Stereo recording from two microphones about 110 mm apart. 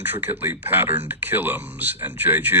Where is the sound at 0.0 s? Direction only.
20° right (ahead or behind).